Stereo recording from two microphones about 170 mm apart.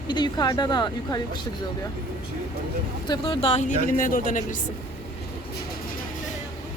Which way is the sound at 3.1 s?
30° left (ahead or behind).